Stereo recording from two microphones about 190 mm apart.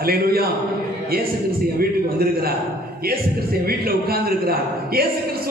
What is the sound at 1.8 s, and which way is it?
Speech, 50° right (ahead or behind).